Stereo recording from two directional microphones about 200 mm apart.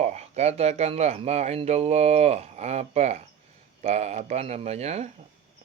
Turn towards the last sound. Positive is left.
turn(degrees=-35)  # may be behind; listen again after turning